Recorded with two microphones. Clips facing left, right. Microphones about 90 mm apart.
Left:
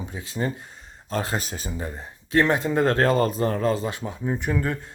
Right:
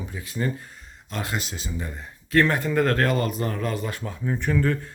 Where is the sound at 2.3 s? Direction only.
20° left (ahead or behind).